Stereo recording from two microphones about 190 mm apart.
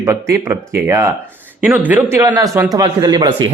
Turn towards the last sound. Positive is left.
turn(degrees=-25)  # may be behind; listen again after turning